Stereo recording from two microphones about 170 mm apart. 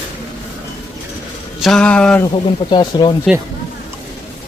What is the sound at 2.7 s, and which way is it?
Speech, 25° left (ahead or behind).